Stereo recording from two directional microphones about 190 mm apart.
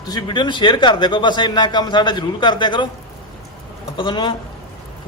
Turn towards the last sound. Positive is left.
turn(degrees=25)  # may be behind; listen again after turning